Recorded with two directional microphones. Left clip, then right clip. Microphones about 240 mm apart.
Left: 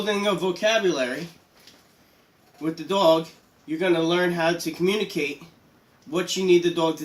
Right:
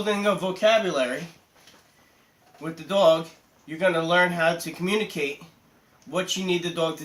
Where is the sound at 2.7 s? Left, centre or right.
Centre.